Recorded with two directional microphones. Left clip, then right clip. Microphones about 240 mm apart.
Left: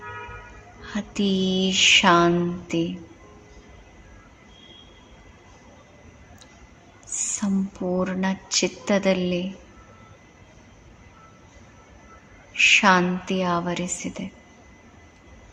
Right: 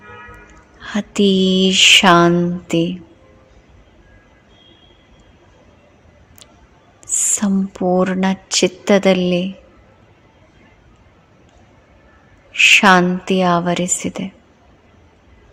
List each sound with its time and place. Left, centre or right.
0.8 s a woman's voice: right
7.3 s a woman's voice: right
12.5 s a woman's voice: right